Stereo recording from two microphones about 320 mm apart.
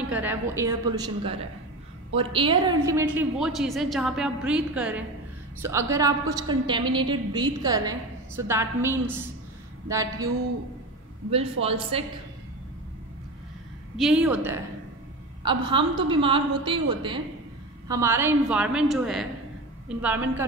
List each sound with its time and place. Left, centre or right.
0.1 s a woman's voice: centre
11.6 s a woman's voice: centre
13.9 s a woman's voice: centre